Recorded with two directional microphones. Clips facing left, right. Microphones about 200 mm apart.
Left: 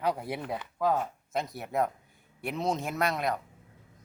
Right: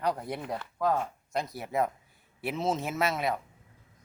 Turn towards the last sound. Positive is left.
turn(degrees=-5)  # may be behind; listen again after turning